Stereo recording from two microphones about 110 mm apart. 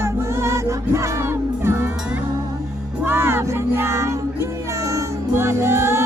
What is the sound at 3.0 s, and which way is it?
Music, 20° right (ahead or behind).